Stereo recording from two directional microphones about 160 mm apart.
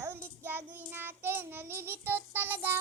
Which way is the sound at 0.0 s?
15° right (ahead or behind).